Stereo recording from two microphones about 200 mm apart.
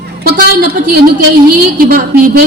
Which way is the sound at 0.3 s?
50° right (ahead or behind).